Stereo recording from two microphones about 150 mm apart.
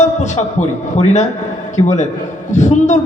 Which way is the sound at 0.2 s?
50° left (ahead or behind).